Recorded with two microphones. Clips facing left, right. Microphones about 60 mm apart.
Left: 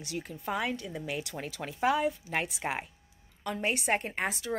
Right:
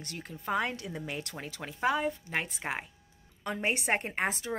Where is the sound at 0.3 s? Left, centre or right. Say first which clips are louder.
Right 2 dB; centre.